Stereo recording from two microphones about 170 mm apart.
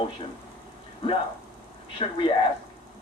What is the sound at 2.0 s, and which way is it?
Speech, 30° left (ahead or behind).